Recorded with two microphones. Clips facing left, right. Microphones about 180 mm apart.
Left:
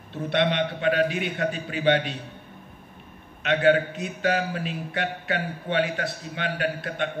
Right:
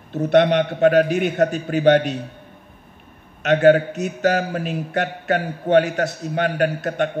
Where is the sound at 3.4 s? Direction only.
45° right (ahead or behind).